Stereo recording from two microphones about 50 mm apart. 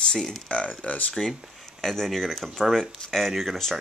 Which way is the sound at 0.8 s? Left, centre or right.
Left.